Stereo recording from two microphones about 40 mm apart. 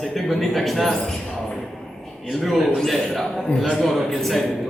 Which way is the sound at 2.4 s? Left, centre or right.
Centre.